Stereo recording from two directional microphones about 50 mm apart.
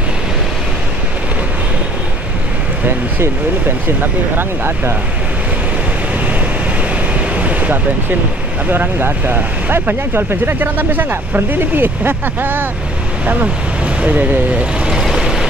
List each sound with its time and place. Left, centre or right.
3.2 s speech: right
7.3 s vehicle: right
8.6 s speech: right
13.3 s speech: right
15.0 s vehicle: centre